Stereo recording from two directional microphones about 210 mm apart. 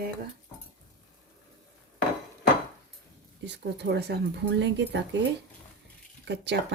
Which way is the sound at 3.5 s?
50° right (ahead or behind).